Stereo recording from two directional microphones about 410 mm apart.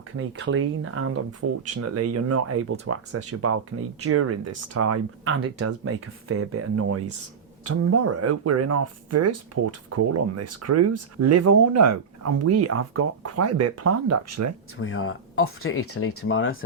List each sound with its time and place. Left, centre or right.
0.2 s speech: right
14.8 s speech: left